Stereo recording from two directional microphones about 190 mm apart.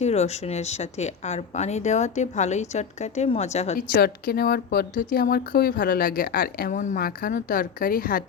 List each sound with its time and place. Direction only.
0.0 s a woman's voice: 35° left (ahead or behind)
3.8 s a woman's voice: 55° left (ahead or behind)